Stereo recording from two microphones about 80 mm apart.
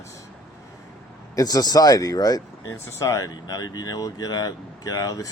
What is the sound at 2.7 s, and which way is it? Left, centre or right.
Speech, left.